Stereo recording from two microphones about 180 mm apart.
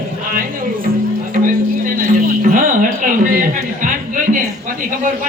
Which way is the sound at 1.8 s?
50° right (ahead or behind).